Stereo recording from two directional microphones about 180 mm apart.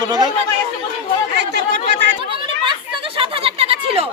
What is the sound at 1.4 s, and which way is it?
Chatter, 75° right (ahead or behind).